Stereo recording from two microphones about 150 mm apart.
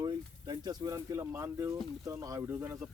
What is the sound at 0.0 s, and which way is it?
A man's voice, 30° right (ahead or behind).